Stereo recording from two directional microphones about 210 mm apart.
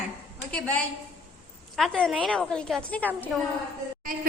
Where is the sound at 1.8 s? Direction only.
5° left (ahead or behind).